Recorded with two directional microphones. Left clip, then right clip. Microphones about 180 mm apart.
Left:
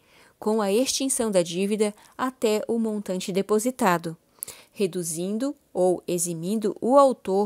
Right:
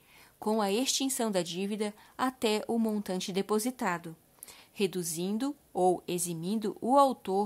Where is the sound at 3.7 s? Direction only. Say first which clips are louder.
Left 10 dB; 45° left (ahead or behind).